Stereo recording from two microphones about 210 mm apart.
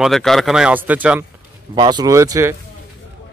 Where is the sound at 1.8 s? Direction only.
20° right (ahead or behind).